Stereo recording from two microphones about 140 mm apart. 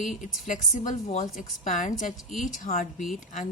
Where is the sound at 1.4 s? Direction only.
65° left (ahead or behind).